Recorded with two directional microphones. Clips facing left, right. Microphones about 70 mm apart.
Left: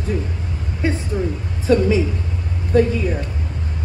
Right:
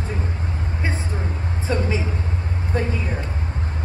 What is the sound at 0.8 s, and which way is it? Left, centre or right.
A woman's voice, right.